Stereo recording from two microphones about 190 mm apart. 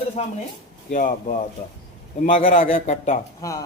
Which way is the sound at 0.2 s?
35° left (ahead or behind).